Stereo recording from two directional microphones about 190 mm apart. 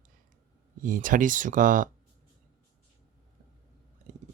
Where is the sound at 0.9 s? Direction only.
45° right (ahead or behind).